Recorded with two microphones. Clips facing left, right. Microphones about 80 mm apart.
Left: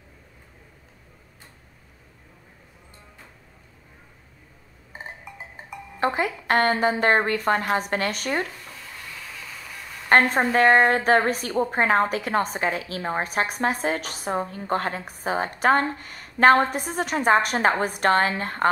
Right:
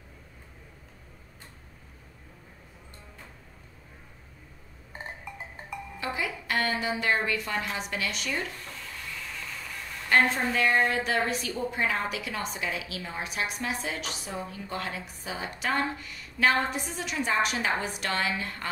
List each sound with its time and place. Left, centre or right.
4.9 s music: centre
5.9 s a woman's voice: left
8.5 s a sound: centre
10.3 s a woman's voice: left